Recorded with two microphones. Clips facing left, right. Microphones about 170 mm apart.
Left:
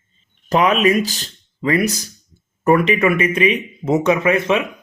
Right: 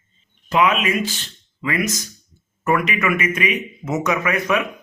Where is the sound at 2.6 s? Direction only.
30° left (ahead or behind).